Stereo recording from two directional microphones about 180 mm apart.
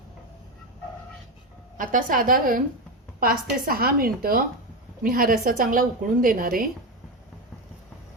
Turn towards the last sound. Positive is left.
turn(degrees=-50)  # may be behind; listen again after turning